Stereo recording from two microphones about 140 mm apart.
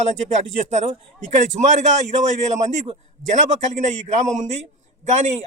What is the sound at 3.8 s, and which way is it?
A man's voice, 55° right (ahead or behind).